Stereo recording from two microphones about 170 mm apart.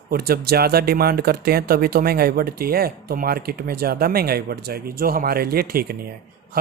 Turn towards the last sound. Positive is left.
turn(degrees=-60)  # may be behind; listen again after turning